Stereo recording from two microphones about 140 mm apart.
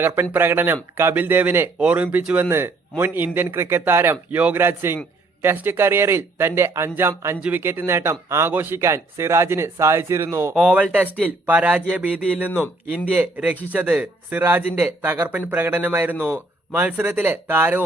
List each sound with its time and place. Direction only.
0.3 s speech: 15° right (ahead or behind)
10.5 s speech: 10° right (ahead or behind)